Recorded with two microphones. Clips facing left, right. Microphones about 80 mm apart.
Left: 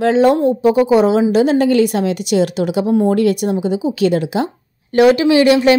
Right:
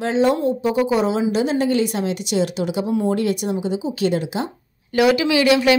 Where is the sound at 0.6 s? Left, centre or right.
Left.